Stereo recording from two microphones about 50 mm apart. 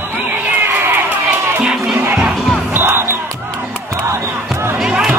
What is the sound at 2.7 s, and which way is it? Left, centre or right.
Music, right.